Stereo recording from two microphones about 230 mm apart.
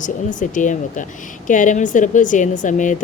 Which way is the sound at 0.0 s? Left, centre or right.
Left.